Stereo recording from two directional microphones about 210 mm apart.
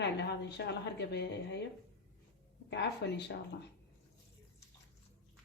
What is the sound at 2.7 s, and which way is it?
Speech, 55° left (ahead or behind).